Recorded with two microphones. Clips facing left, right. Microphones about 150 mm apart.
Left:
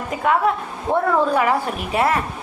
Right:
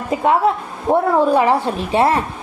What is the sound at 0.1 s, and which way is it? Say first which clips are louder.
A woman's voice: right 3 dB; 25° right (ahead or behind).